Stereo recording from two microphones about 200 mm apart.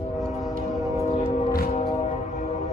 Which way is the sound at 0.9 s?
30° left (ahead or behind).